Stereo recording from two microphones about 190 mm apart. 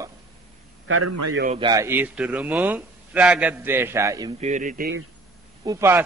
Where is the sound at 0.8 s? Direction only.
90° right.